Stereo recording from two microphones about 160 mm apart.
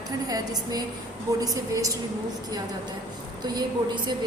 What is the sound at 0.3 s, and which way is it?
A woman's voice, 25° right (ahead or behind).